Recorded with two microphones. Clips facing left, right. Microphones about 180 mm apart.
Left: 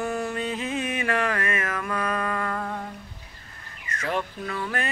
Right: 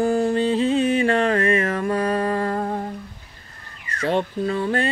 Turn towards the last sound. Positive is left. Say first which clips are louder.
# right 8 dB
turn(degrees=-30)  # may be behind; listen again after turning